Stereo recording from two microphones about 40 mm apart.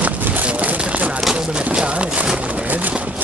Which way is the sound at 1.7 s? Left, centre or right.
Right.